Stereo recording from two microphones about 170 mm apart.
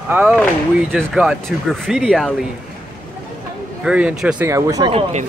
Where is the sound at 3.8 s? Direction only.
5° right (ahead or behind).